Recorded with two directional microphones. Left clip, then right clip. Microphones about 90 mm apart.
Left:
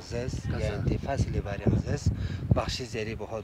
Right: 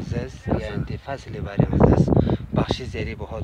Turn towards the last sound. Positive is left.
turn(degrees=-35)  # may be behind; listen again after turning